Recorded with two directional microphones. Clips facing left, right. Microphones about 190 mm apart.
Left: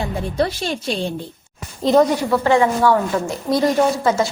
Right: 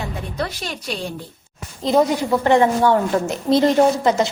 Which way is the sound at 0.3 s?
30° left (ahead or behind).